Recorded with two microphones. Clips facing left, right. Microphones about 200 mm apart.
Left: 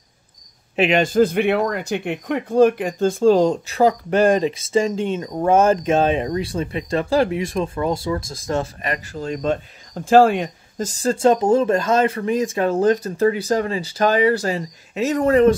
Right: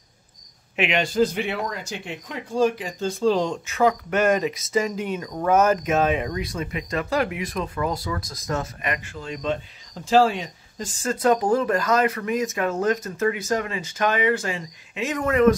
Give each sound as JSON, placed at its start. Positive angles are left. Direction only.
{"t": 0.7, "sound": "speech", "side_deg": 40}
{"t": 10.9, "sound": "speech", "side_deg": 35}